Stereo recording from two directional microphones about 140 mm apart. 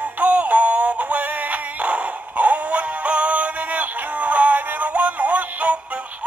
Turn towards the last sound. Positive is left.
turn(degrees=-10)  # may be behind; listen again after turning